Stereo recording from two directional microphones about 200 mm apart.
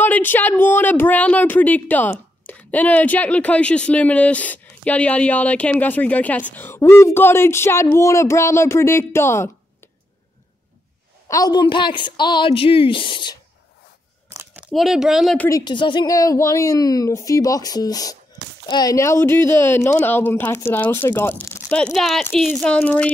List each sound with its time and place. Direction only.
0.0 s speech: 10° left (ahead or behind)
11.2 s a woman's voice: 20° left (ahead or behind)
14.3 s a sound: 10° right (ahead or behind)
14.7 s speech: centre (ahead or behind)
15.6 s speech: 25° left (ahead or behind); by 23.1 s 5° left (ahead or behind)